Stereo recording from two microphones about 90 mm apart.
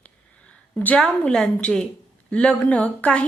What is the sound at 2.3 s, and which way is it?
Speech, 10° left (ahead or behind).